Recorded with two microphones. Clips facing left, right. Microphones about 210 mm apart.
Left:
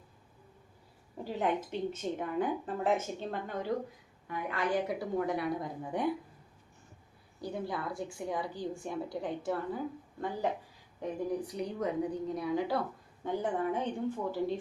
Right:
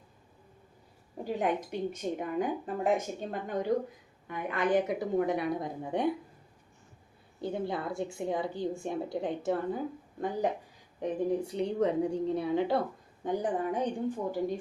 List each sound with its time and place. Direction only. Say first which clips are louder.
1.2 s a woman's voice: right 2 dB; 15° right (ahead or behind)
7.4 s a woman's voice: right 3 dB; 25° right (ahead or behind)
13.2 s speech: right 2 dB; 15° right (ahead or behind)